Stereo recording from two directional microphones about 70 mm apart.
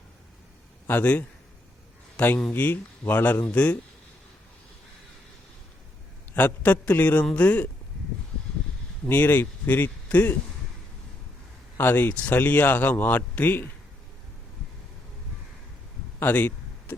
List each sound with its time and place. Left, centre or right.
0.9 s speech: left
6.3 s speech: left
9.0 s speech: left
11.8 s speech: left
16.2 s a sound: left